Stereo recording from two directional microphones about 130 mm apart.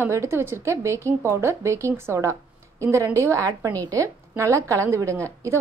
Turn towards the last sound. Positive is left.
turn(degrees=-20)  # may be behind; listen again after turning